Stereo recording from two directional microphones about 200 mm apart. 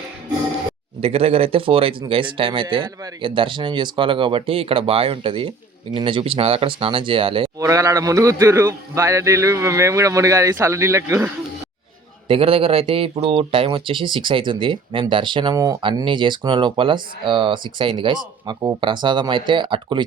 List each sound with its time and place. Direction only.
1.0 s speech: 30° right (ahead or behind)
7.6 s a man's voice: 15° right (ahead or behind)
12.3 s speech: 30° right (ahead or behind)